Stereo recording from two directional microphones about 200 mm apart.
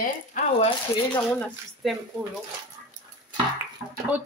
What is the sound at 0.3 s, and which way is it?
Speech, 40° left (ahead or behind).